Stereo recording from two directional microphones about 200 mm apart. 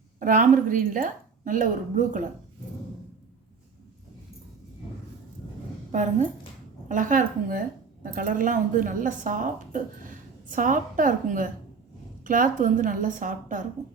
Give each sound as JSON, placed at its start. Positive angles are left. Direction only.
{"t": 0.2, "sound": "a woman's voice", "side_deg": -40}
{"t": 5.9, "sound": "a woman's voice", "side_deg": -40}